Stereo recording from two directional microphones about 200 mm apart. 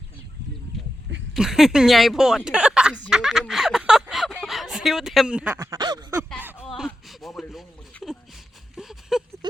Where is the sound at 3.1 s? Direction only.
Centre (ahead or behind); by 6.2 s 20° right (ahead or behind).